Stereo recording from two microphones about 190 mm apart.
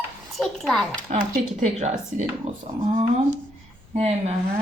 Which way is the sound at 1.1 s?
35° right (ahead or behind).